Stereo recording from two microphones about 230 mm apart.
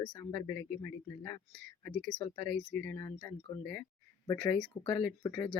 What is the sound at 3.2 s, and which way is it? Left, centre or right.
Speech, right.